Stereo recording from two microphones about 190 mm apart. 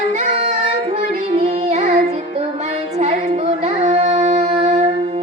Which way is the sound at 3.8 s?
35° right (ahead or behind).